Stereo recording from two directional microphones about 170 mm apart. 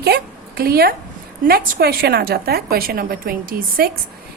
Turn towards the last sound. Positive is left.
turn(degrees=-60)  # may be behind; listen again after turning